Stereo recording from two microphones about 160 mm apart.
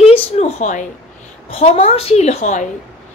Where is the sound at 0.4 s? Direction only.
50° left (ahead or behind).